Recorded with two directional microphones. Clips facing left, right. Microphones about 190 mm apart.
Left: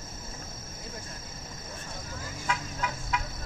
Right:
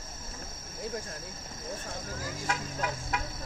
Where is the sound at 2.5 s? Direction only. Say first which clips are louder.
Left 1 dB; 45° right (ahead or behind).